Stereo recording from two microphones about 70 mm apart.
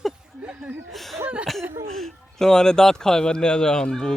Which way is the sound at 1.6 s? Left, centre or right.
Right.